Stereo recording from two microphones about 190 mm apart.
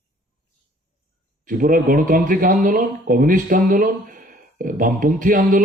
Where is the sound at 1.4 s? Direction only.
45° right (ahead or behind).